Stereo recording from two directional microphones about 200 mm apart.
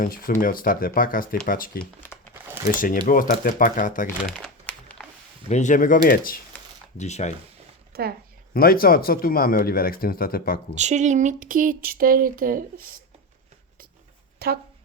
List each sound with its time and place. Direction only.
0.0 s speech: 45° left (ahead or behind)
3.1 s speech: 45° left (ahead or behind)
4.2 s crumpling: centre (ahead or behind)
5.5 s speech: 35° left (ahead or behind)
6.9 s speech: 35° left (ahead or behind)
7.9 s speech: 50° right (ahead or behind)
8.5 s speech: 45° left (ahead or behind)
10.8 s speech: 35° right (ahead or behind)
14.3 s speech: 50° right (ahead or behind)